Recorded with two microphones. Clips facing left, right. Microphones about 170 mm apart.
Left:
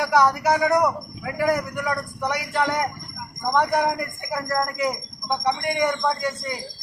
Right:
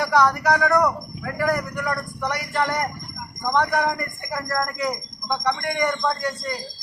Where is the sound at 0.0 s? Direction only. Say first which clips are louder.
Even; 15° left (ahead or behind).